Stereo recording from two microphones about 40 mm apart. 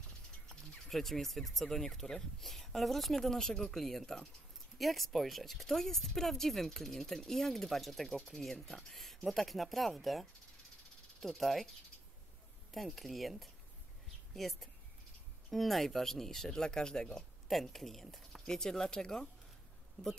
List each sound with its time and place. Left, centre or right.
0.5 s speech: centre
12.7 s speech: centre
17.5 s speech: centre
18.5 s speech: centre